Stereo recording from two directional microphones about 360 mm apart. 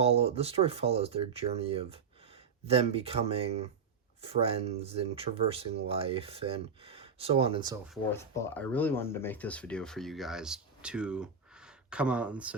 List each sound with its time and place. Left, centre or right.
0.0 s speech: centre
8.1 s speech: centre